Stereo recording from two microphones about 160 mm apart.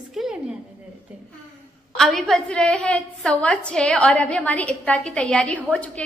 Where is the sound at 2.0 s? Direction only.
Centre (ahead or behind).